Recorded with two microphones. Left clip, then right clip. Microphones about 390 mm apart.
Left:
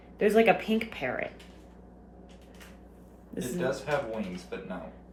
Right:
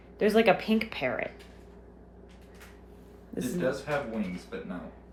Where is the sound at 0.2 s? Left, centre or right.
Centre.